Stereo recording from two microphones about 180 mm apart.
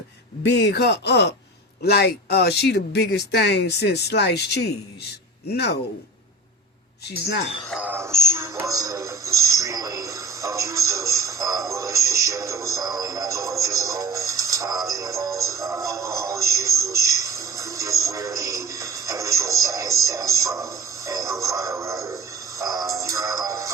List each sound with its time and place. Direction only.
0.4 s speech: 70° left (ahead or behind)
7.7 s music: 10° right (ahead or behind)